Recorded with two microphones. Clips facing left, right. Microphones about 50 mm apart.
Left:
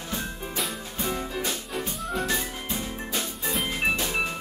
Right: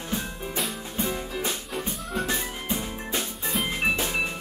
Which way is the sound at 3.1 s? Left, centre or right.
Centre.